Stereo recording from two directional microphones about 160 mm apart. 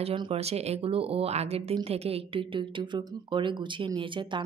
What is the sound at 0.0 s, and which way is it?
A woman's voice, 40° right (ahead or behind).